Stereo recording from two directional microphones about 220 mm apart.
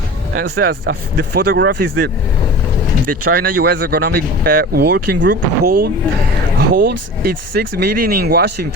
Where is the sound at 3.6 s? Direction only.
45° right (ahead or behind).